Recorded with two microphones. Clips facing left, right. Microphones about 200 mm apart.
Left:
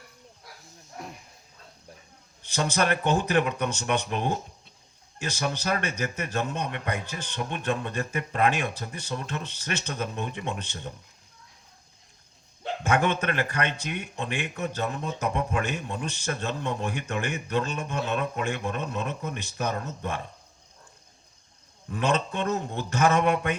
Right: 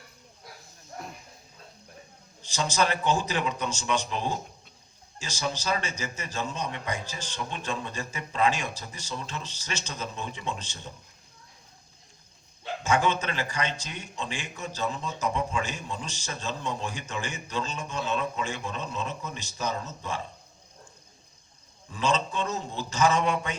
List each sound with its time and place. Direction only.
2.4 s speech: 60° left (ahead or behind)
12.8 s speech: 60° left (ahead or behind)
21.8 s speech: 60° left (ahead or behind)